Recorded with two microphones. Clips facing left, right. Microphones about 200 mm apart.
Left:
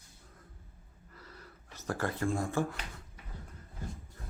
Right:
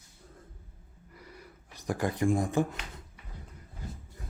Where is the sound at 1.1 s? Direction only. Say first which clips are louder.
Right 3 dB; 15° right (ahead or behind).